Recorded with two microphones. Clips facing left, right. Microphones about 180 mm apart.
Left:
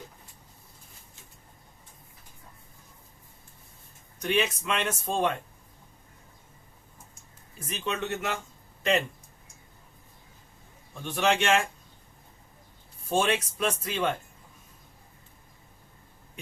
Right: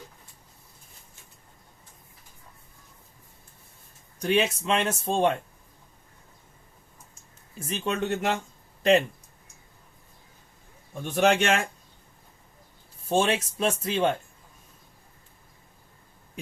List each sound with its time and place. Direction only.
4.2 s speech: 35° right (ahead or behind)
7.7 s speech: 40° right (ahead or behind)
11.0 s a man's voice: 45° right (ahead or behind)
13.1 s speech: 25° right (ahead or behind)